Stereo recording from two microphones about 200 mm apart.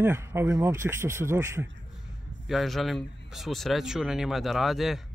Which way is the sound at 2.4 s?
Centre (ahead or behind).